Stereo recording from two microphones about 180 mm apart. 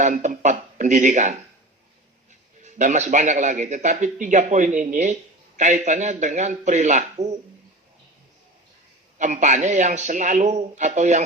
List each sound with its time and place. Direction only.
0.0 s a man's voice: 45° right (ahead or behind)
2.6 s a man's voice: 40° right (ahead or behind)
9.1 s a man's voice: 45° right (ahead or behind)